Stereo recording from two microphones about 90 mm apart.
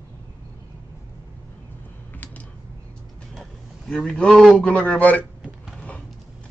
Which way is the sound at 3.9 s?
10° left (ahead or behind).